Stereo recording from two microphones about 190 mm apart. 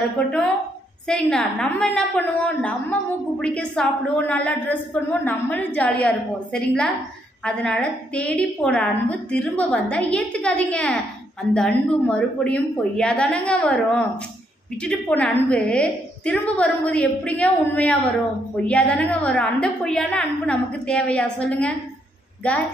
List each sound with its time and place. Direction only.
0.2 s a woman's voice: 5° left (ahead or behind)